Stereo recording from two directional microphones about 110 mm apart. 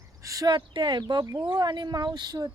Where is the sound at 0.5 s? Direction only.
45° right (ahead or behind).